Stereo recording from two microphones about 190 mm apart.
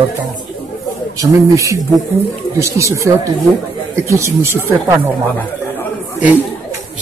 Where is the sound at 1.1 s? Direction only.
15° right (ahead or behind).